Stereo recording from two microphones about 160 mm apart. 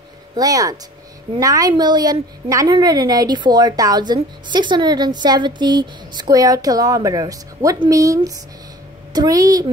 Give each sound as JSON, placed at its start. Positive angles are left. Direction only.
{"t": 0.4, "sound": "a woman's voice", "side_deg": -20}